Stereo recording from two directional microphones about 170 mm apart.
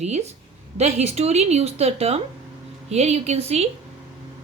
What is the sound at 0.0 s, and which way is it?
Speech, 40° right (ahead or behind).